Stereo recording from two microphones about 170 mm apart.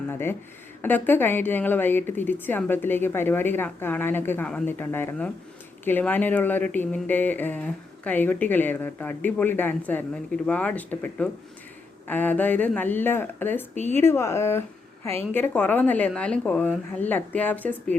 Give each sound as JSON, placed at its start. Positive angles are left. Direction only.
{"t": 0.1, "sound": "speech", "side_deg": 15}